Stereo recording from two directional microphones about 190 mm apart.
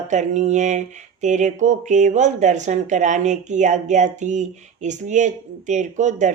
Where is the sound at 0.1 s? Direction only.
40° right (ahead or behind).